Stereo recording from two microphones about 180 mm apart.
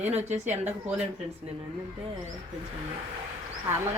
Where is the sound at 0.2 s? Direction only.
40° right (ahead or behind).